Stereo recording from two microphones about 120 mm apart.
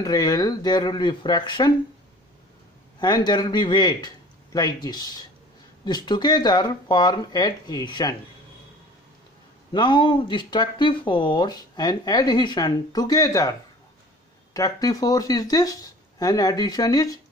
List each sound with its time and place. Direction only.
0.0 s speech: 35° left (ahead or behind)
3.0 s speech: 35° left (ahead or behind)
9.7 s speech: 40° left (ahead or behind)